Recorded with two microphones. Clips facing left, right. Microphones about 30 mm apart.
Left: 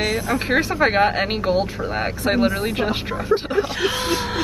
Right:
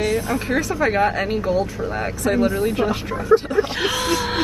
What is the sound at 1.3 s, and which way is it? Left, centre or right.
Speech, left.